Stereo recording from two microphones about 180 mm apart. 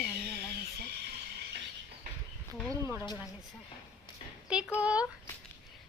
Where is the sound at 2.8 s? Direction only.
10° right (ahead or behind).